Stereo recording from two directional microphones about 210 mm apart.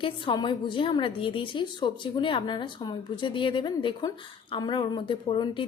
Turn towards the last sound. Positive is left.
turn(degrees=25)  # may be behind; listen again after turning